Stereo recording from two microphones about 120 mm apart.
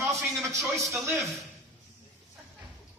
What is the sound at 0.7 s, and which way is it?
Speech, 25° right (ahead or behind).